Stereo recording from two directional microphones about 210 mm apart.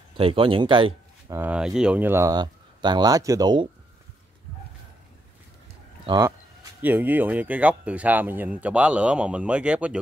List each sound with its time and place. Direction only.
0.2 s speech: 25° right (ahead or behind)
1.3 s speech: 5° right (ahead or behind)
6.0 s speech: 20° right (ahead or behind)
6.8 s speech: 10° right (ahead or behind)